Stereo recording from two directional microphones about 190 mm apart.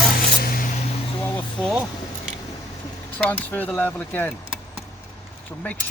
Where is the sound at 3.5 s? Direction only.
10° left (ahead or behind).